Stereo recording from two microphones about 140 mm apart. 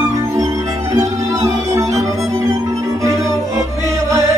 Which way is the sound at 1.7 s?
20° right (ahead or behind).